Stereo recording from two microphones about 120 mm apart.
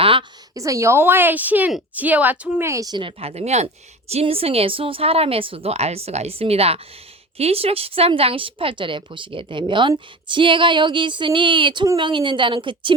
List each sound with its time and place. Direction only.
0.0 s a sound: 45° right (ahead or behind)
0.5 s a woman's voice: 25° right (ahead or behind)
2.6 s speech: 30° right (ahead or behind)
3.0 s speech: 50° right (ahead or behind); by 3.7 s 65° right (ahead or behind)
4.1 s speech: 55° right (ahead or behind)